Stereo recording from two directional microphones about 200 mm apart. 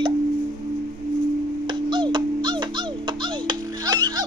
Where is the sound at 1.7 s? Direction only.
25° right (ahead or behind).